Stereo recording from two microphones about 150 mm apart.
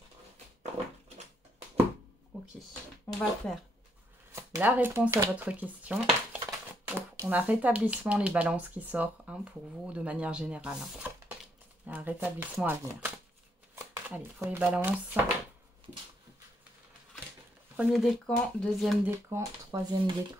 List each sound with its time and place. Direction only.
2.3 s a sound: 10° right (ahead or behind)
3.1 s speech: centre (ahead or behind)
4.4 s speech: 15° right (ahead or behind)
17.7 s speech: centre (ahead or behind)
19.0 s speech: 15° right (ahead or behind)
19.7 s speech: 30° right (ahead or behind)